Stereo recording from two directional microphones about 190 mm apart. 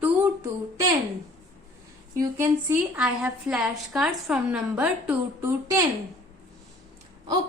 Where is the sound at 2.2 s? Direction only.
10° right (ahead or behind).